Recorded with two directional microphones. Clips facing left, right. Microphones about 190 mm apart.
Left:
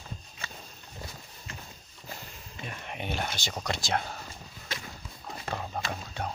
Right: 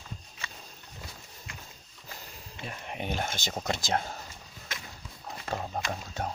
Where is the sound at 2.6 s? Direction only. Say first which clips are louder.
Right 1 dB; 35° right (ahead or behind).